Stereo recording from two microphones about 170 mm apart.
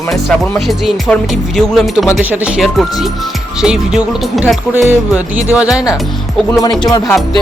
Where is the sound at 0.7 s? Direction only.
Centre (ahead or behind).